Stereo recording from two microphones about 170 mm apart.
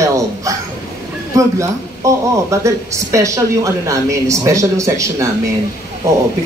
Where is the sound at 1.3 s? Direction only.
20° right (ahead or behind).